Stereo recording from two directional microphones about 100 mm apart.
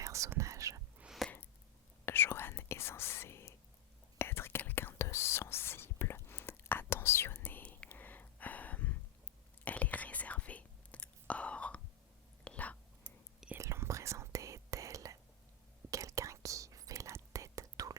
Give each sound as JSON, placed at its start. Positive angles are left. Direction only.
{"t": 0.0, "sound": "whispering", "side_deg": -30}
{"t": 1.2, "sound": "a sound", "side_deg": 0}
{"t": 2.0, "sound": "whispering", "side_deg": 20}
{"t": 7.9, "sound": "a sound", "side_deg": 20}
{"t": 9.6, "sound": "whispering", "side_deg": 15}
{"t": 13.6, "sound": "whispering", "side_deg": -30}